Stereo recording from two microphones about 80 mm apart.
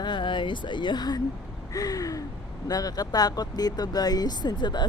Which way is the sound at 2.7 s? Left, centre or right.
Left.